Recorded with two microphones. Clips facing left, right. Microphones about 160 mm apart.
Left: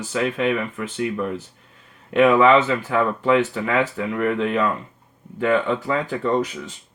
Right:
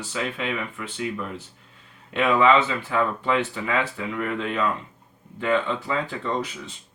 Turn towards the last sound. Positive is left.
turn(degrees=45)  # may be behind; listen again after turning